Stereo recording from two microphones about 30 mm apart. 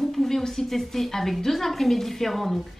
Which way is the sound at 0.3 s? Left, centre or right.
Centre.